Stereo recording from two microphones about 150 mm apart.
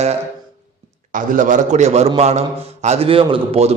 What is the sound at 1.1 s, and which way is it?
A man's voice, 60° right (ahead or behind).